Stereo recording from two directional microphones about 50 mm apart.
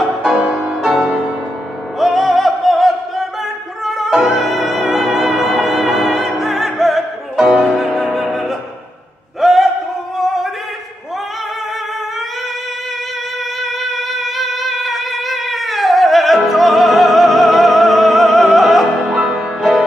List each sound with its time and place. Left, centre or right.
0.2 s music: centre
9.4 s a sound: centre
13.6 s music: centre